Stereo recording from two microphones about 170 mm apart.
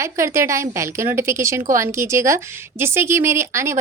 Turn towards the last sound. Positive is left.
turn(degrees=-15)  # may be behind; listen again after turning